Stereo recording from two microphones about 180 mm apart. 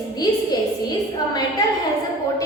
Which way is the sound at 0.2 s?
20° left (ahead or behind).